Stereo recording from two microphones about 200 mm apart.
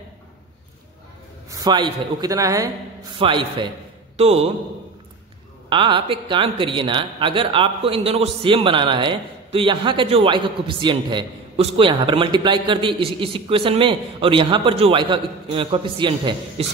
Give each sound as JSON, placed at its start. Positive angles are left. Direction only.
{"t": 1.5, "sound": "a woman's voice", "side_deg": -20}
{"t": 5.7, "sound": "a woman's voice", "side_deg": -25}